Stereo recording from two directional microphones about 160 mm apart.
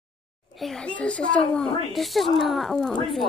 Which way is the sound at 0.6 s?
5° left (ahead or behind).